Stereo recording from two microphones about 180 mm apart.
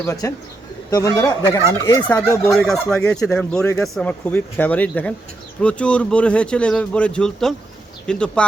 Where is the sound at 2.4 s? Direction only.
Centre (ahead or behind).